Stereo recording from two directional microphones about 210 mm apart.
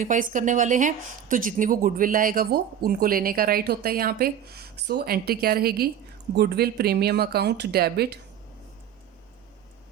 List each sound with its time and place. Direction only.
0.0 s a woman's voice: 40° right (ahead or behind)